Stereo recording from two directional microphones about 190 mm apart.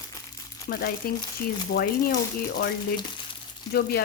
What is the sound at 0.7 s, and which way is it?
A woman's voice, 50° left (ahead or behind).